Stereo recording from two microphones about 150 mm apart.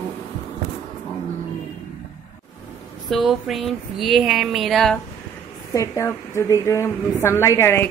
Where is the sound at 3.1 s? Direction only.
Centre (ahead or behind).